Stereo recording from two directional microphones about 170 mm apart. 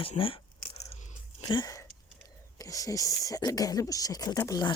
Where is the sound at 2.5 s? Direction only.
20° left (ahead or behind).